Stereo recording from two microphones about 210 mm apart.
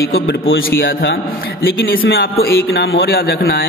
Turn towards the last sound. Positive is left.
turn(degrees=45)  # may be behind; listen again after turning